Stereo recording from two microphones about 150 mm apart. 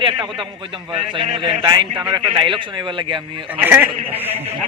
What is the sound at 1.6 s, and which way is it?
Speech, 30° right (ahead or behind).